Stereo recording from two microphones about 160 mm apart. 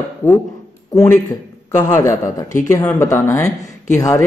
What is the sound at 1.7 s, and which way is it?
Speech, 20° left (ahead or behind).